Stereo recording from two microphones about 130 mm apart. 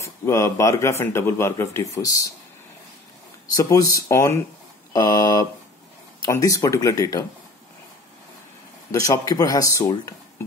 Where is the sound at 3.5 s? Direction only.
25° left (ahead or behind).